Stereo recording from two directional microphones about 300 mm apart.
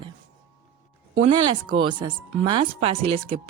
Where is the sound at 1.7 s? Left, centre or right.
Centre.